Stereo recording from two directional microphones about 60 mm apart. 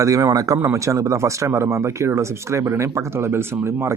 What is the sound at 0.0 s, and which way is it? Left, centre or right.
Speech, right.